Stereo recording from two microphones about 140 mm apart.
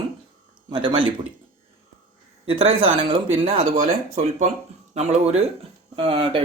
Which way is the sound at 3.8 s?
55° right (ahead or behind).